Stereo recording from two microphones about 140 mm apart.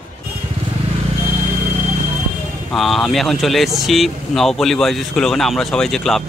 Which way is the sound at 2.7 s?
Centre (ahead or behind).